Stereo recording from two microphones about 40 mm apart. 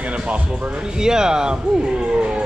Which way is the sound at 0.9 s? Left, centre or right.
Centre.